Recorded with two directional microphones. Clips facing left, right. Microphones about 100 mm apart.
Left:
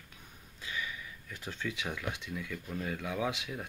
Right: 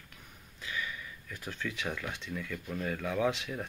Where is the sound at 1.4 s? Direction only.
15° left (ahead or behind).